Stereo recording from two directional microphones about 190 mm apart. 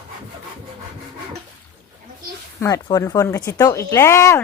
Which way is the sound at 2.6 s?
20° left (ahead or behind).